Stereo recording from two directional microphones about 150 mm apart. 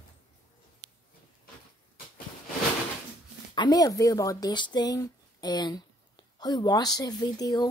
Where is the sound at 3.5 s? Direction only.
25° left (ahead or behind).